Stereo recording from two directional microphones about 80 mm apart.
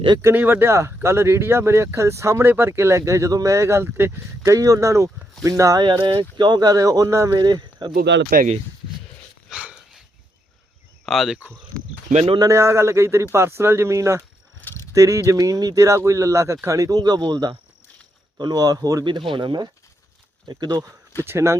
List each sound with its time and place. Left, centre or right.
0.3 s speech: right
4.4 s speech: right
5.8 s speech: right
7.3 s speech: right
9.5 s dog: centre
11.0 s speech: centre
12.5 s speech: right
14.6 s a sound: left
14.9 s speech: right
17.0 s speech: right
19.3 s speech: right
20.5 s speech: right
21.2 s speech: right